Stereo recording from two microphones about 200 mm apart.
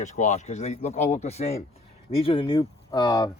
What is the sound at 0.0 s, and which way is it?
Speech, 35° left (ahead or behind).